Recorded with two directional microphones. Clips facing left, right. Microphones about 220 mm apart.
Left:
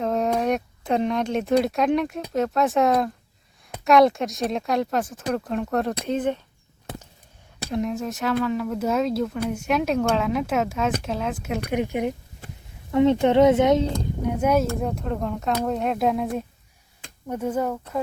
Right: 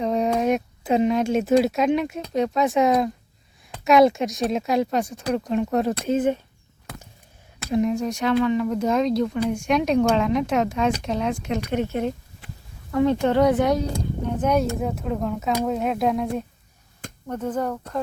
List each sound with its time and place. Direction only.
0.0 s speech: centre (ahead or behind)
7.7 s speech: centre (ahead or behind); by 13.8 s 20° left (ahead or behind)
14.3 s speech: 5° left (ahead or behind)